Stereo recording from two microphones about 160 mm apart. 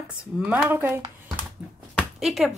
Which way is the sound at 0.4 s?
10° right (ahead or behind).